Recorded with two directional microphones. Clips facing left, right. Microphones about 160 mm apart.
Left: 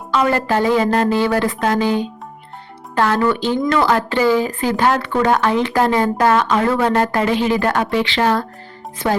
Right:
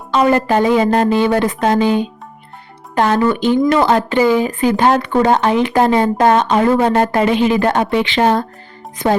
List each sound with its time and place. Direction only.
0.1 s speech: 20° right (ahead or behind)